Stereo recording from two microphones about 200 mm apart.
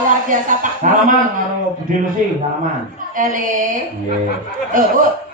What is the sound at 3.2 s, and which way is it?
Speech, 40° right (ahead or behind).